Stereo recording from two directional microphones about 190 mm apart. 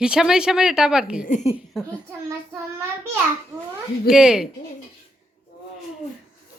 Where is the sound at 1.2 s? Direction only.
40° left (ahead or behind).